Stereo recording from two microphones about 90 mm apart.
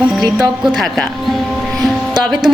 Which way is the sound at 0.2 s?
5° right (ahead or behind).